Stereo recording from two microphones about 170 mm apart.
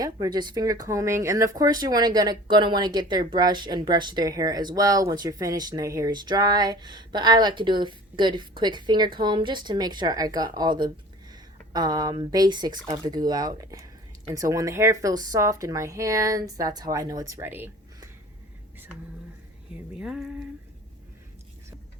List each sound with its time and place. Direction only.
0.0 s speech: 25° right (ahead or behind)
19.9 s speech: 5° right (ahead or behind)